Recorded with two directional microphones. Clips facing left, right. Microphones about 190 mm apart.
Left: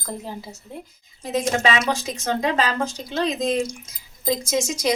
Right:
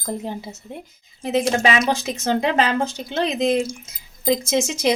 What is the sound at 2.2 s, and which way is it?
Speech, 25° right (ahead or behind).